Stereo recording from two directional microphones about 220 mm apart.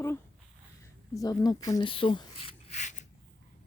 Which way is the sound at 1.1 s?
15° left (ahead or behind).